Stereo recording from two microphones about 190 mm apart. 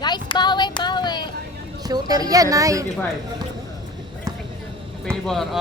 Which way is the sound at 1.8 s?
20° right (ahead or behind).